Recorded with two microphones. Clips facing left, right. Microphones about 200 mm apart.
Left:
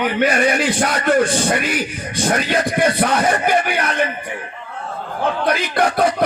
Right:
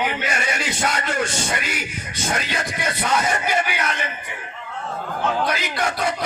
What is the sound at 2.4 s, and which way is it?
Music, 55° left (ahead or behind).